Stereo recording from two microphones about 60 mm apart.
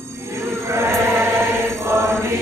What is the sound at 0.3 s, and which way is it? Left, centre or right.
Chant, right.